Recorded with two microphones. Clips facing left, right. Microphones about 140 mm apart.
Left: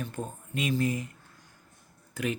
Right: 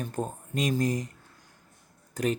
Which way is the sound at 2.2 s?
40° right (ahead or behind).